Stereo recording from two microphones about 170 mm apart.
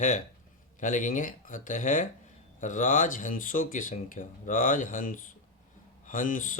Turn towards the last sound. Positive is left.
turn(degrees=50)  # may be behind; listen again after turning